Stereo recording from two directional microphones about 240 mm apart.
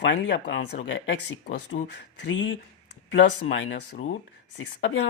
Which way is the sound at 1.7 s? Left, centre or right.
Left.